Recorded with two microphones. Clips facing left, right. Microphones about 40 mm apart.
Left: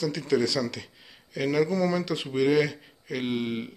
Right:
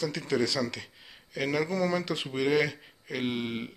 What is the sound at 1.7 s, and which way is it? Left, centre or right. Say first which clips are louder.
Speech: left 3 dB; centre.